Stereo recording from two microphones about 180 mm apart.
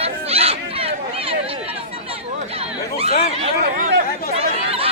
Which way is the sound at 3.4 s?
45° right (ahead or behind).